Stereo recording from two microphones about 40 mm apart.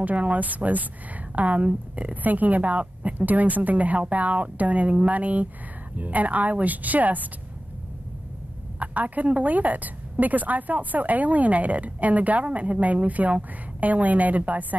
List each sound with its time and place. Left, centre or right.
0.0 s a woman's voice: right
2.2 s a woman's voice: right
8.7 s a woman's voice: right